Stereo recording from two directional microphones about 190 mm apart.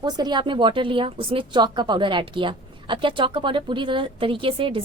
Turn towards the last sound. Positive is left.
turn(degrees=-30)  # may be behind; listen again after turning